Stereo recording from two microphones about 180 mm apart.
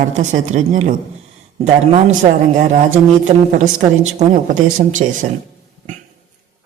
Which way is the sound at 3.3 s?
35° right (ahead or behind).